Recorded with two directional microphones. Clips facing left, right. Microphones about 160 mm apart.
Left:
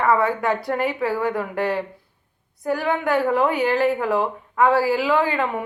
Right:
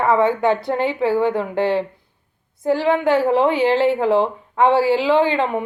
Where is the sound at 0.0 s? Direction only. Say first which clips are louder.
Right 3 dB; 25° right (ahead or behind).